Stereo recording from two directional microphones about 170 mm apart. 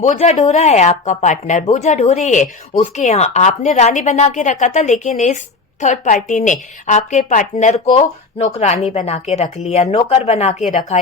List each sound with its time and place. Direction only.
0.0 s a woman's voice: 40° left (ahead or behind)